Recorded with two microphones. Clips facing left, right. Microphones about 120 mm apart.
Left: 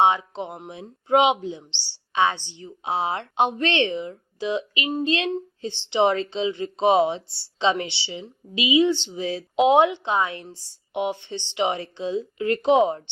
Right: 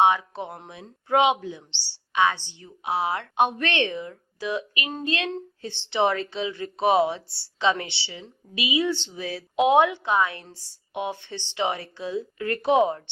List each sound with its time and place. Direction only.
0.0 s speech: 25° left (ahead or behind)